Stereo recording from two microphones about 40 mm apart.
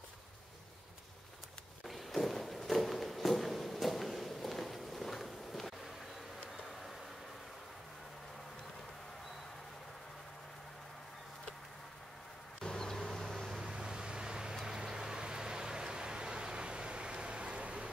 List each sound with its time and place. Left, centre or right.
1.9 s walk: centre
12.5 s vehicle: centre
13.7 s vehicle: right